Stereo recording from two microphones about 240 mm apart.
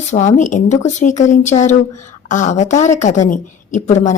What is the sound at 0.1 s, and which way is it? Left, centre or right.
A woman's voice, left.